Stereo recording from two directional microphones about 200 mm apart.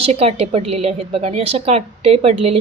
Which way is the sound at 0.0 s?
30° right (ahead or behind).